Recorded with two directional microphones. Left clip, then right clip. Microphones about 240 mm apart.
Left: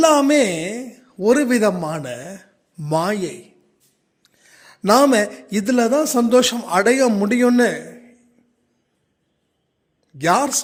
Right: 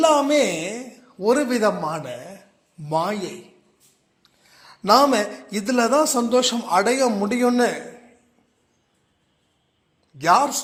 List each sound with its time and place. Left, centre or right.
0.0 s a man's voice: left
10.2 s a man's voice: left